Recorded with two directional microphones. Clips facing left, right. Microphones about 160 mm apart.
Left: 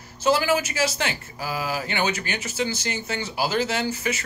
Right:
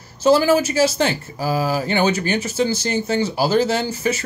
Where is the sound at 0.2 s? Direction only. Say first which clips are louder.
Right 7 dB; 35° right (ahead or behind).